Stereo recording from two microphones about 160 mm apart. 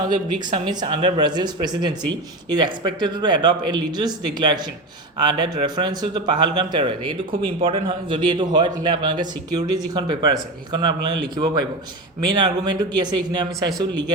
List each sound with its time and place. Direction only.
0.0 s speech: 25° right (ahead or behind)
12.6 s speech: 25° right (ahead or behind)